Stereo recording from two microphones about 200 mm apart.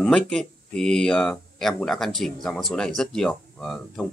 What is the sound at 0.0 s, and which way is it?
Speech, 5° left (ahead or behind).